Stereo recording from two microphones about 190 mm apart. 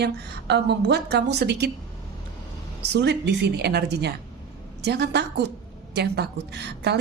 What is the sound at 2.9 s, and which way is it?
Speech, 65° right (ahead or behind).